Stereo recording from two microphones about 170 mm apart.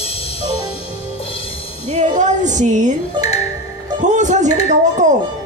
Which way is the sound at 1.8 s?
45° right (ahead or behind).